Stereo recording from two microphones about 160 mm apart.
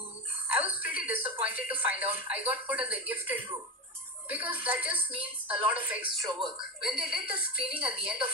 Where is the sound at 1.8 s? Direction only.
10° right (ahead or behind).